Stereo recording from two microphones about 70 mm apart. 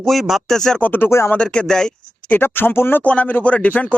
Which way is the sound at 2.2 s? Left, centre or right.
Left.